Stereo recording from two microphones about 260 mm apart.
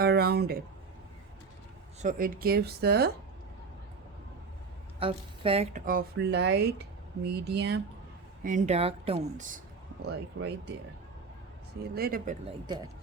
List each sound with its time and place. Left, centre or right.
0.0 s speech: right
2.0 s speech: right
4.9 s speech: right
8.4 s speech: right
10.3 s speech: right
11.9 s speech: right